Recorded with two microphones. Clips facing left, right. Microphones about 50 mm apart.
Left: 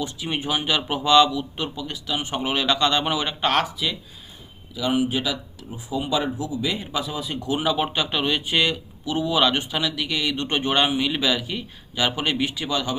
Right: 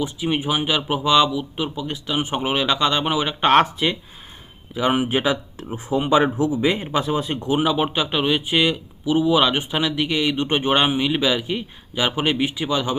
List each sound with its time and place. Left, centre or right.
0.0 s speech: centre
3.4 s speech: right
5.6 s speech: right
7.6 s speech: centre